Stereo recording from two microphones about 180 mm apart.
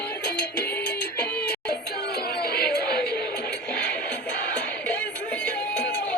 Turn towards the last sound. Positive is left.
turn(degrees=5)  # may be behind; listen again after turning